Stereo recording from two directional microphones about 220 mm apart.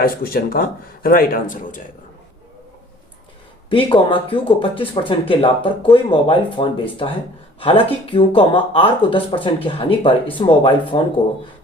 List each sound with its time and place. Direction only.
0.0 s speech: 40° left (ahead or behind)
3.7 s speech: 25° left (ahead or behind)